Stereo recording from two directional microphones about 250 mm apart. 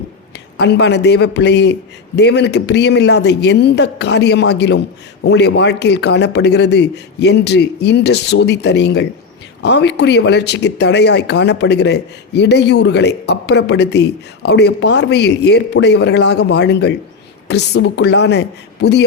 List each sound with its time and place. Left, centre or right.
0.6 s speech: left